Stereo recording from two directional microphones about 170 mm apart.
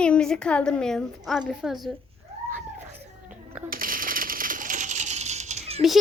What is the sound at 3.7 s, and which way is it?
Typewriter, 55° right (ahead or behind).